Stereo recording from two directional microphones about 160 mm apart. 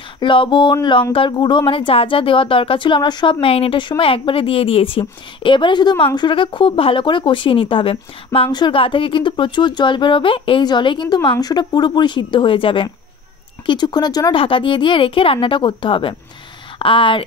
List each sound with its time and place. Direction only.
0.2 s speech: 30° left (ahead or behind)